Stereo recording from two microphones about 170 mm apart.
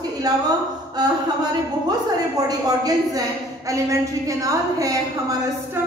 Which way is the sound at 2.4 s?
20° right (ahead or behind).